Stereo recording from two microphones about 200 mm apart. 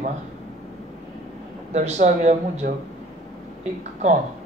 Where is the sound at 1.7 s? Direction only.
35° right (ahead or behind).